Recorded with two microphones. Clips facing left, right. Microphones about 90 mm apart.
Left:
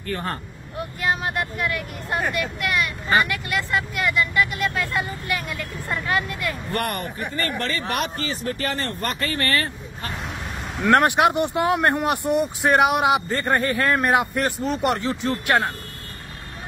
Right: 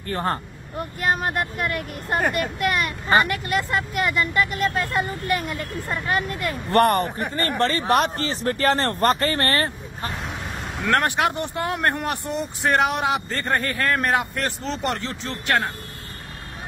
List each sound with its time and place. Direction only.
0.1 s speech: 35° right (ahead or behind)
0.7 s speech: 45° right (ahead or behind)
7.8 s speech: 25° right (ahead or behind)
8.2 s speech: 40° right (ahead or behind)
10.9 s speech: 15° left (ahead or behind)